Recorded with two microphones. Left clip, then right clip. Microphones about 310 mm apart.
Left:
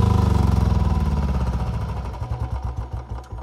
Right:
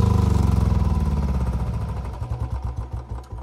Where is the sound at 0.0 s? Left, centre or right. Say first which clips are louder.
Left 2 dB; centre.